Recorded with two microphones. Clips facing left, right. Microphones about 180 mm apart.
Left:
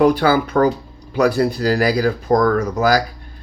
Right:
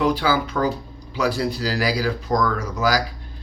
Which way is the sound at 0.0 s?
55° left (ahead or behind).